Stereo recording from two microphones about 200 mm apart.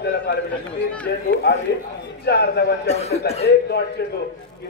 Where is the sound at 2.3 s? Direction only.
55° left (ahead or behind).